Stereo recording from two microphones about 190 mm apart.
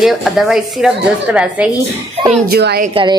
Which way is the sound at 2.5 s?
55° right (ahead or behind).